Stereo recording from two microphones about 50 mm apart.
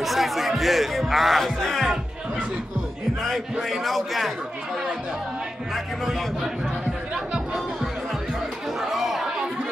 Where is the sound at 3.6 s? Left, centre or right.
Centre.